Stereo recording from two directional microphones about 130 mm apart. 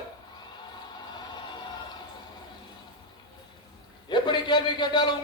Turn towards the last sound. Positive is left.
turn(degrees=35)  # may be behind; listen again after turning